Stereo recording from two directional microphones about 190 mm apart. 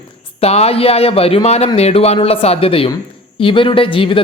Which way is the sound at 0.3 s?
35° left (ahead or behind).